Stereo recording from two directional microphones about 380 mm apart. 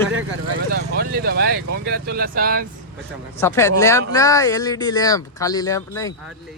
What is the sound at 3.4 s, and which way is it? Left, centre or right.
Speech, centre.